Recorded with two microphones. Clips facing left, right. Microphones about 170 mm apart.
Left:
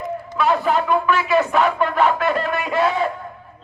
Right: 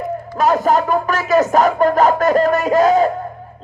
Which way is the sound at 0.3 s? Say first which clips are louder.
Right 4 dB; 40° right (ahead or behind).